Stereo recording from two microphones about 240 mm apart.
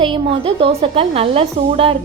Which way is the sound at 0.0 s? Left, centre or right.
Right.